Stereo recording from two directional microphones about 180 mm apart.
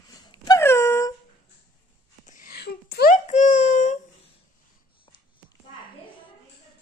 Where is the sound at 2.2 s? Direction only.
55° left (ahead or behind).